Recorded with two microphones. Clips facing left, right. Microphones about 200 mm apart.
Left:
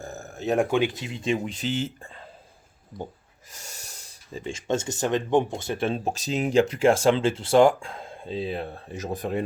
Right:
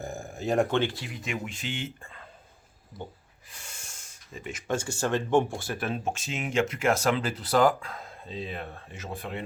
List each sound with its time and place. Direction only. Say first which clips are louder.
0.0 s a sound: right 1 dB; 10° right (ahead or behind)
0.4 s speech: left 3 dB; 5° left (ahead or behind); by 2.2 s 30° left (ahead or behind)
2.9 s speech: left 4 dB; 5° right (ahead or behind)
3.5 s speech: left 4 dB; 40° left (ahead or behind)